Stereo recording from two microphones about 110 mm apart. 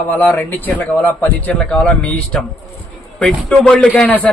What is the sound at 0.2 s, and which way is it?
Speech, 15° left (ahead or behind).